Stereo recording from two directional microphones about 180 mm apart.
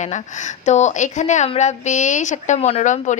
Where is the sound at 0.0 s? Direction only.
40° left (ahead or behind).